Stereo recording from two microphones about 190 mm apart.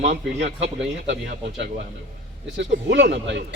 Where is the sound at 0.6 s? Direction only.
70° right (ahead or behind).